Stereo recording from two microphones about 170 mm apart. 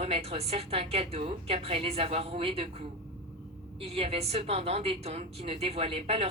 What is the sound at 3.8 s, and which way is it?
A woman's voice, 35° right (ahead or behind).